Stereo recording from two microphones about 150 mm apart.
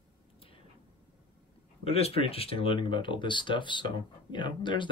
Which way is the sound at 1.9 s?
40° left (ahead or behind).